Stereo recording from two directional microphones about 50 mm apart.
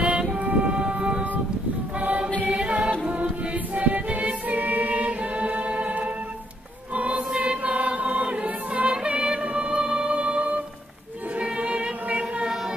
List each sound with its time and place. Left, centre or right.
0.0 s music: right
2.0 s choir: right
2.5 s music: right
3.1 s choir: right
11.3 s music: right